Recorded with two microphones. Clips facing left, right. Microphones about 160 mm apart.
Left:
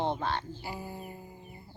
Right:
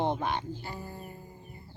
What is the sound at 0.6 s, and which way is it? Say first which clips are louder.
Speech: left 1 dB; 10° left (ahead or behind).